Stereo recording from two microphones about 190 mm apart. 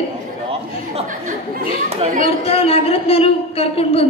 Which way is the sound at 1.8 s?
35° right (ahead or behind).